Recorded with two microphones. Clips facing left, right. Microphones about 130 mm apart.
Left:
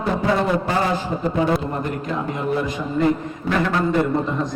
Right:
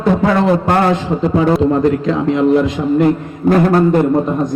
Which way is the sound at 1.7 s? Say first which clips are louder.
Right 11 dB; 90° right.